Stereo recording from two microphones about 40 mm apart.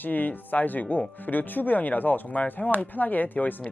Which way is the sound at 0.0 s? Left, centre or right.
Left.